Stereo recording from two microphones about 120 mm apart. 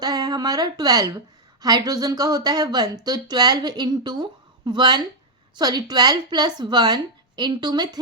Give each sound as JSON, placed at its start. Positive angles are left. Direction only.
{"t": 0.0, "sound": "a woman's voice", "side_deg": -35}